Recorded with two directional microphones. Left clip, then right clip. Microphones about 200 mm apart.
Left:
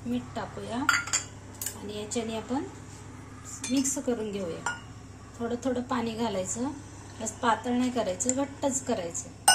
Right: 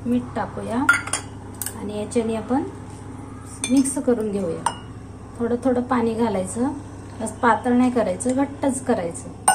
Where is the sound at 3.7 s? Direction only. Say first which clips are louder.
Right 9 dB; centre (ahead or behind).